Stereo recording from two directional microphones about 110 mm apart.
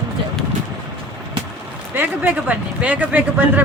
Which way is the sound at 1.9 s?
15° right (ahead or behind).